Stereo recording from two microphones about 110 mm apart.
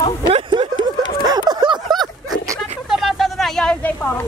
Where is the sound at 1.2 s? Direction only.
40° right (ahead or behind).